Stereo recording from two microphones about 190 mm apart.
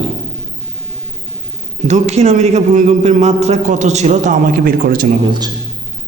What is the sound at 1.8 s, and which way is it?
Speech, 35° right (ahead or behind).